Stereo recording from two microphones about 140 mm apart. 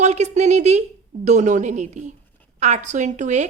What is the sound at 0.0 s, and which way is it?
A woman's voice, 55° right (ahead or behind).